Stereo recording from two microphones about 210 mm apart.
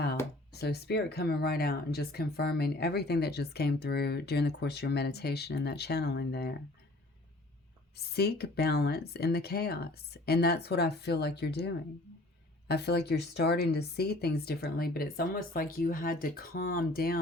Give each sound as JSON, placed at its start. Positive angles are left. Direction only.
{"t": 0.5, "sound": "speech", "side_deg": 50}
{"t": 7.9, "sound": "speech", "side_deg": 50}